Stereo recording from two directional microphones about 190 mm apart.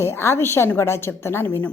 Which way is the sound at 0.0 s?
15° left (ahead or behind).